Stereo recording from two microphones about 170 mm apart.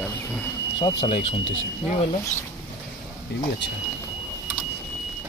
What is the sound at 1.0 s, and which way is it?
Speech, 30° left (ahead or behind).